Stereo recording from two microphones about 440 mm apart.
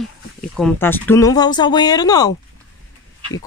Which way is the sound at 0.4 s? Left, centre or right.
Centre.